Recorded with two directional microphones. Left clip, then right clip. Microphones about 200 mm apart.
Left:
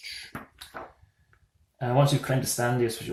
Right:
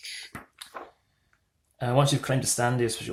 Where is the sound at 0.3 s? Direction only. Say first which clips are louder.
Left 1 dB; 40° right (ahead or behind).